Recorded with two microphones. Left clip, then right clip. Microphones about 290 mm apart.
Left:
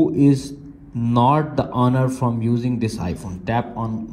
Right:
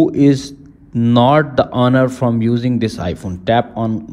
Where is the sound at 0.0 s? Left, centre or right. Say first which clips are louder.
Right 4 dB; left.